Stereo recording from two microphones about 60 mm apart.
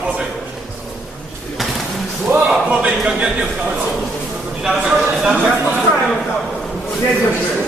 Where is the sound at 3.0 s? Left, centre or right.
Centre.